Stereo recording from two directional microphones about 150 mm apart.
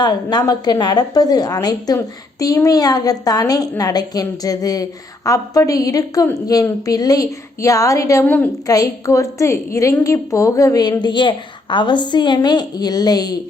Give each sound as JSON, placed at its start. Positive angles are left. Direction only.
{"t": 0.0, "sound": "a woman's voice", "side_deg": 25}
{"t": 8.6, "sound": "a woman's voice", "side_deg": 25}